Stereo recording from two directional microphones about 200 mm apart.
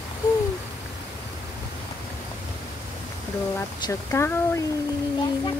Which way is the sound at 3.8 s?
15° left (ahead or behind).